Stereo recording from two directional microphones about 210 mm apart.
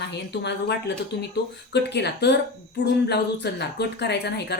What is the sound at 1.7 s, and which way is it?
A woman's voice, 55° left (ahead or behind).